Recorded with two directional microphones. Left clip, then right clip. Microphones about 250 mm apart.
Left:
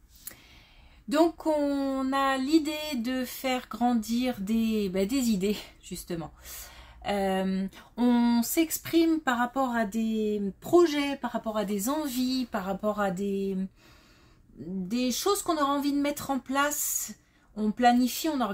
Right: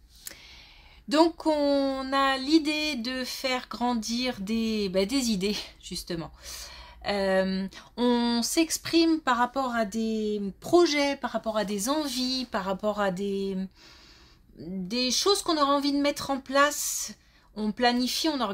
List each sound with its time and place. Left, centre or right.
1.0 s speech: right
14.9 s speech: right